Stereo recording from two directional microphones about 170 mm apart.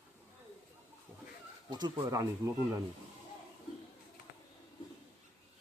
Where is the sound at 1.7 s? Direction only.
20° right (ahead or behind).